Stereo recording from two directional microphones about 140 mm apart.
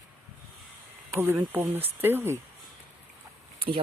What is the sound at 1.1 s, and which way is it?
Speech, 15° right (ahead or behind).